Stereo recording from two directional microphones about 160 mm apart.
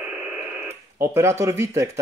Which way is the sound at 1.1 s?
15° right (ahead or behind).